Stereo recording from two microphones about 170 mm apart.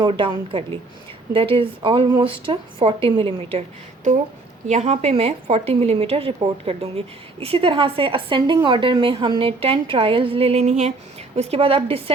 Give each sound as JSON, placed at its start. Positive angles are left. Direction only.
{"t": 0.0, "sound": "a woman's voice", "side_deg": -30}
{"t": 4.7, "sound": "a woman's voice", "side_deg": -40}